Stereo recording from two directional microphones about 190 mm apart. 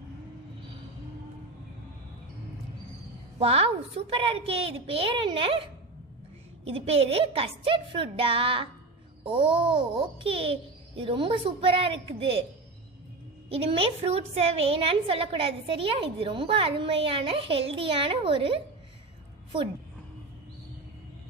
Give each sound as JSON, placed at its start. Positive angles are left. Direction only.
{"t": 3.3, "sound": "a woman's voice", "side_deg": -30}
{"t": 6.7, "sound": "a woman's voice", "side_deg": -30}
{"t": 13.5, "sound": "a woman's voice", "side_deg": -30}